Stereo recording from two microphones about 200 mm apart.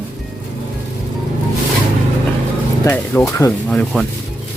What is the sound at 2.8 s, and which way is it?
Speech, 10° left (ahead or behind).